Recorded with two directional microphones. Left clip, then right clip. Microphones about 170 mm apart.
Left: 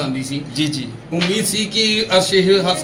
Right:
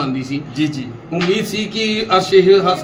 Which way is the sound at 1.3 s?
50° right (ahead or behind).